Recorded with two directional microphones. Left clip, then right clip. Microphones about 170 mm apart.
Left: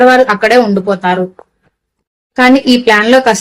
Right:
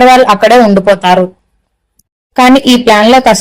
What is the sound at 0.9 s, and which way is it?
Speech, 45° right (ahead or behind).